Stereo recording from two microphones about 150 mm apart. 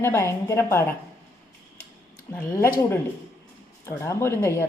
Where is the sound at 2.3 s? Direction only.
15° left (ahead or behind).